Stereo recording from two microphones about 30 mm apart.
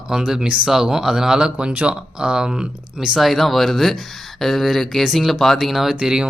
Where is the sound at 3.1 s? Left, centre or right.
Centre.